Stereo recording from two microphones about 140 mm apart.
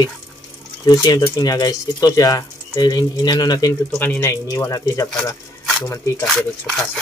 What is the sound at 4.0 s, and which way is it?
Speech, 15° left (ahead or behind).